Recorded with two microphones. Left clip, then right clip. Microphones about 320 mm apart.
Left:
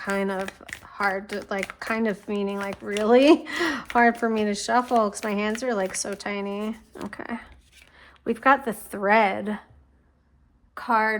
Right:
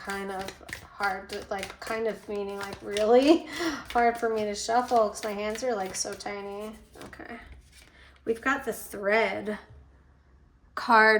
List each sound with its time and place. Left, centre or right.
0.9 s a woman's voice: left; by 9.6 s centre
10.8 s a woman's voice: centre